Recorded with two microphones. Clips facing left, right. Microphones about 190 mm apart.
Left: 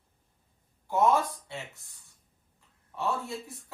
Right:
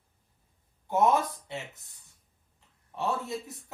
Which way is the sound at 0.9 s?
20° right (ahead or behind).